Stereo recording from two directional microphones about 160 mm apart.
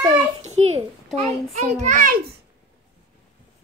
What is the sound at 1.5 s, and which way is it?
Speech, 55° right (ahead or behind).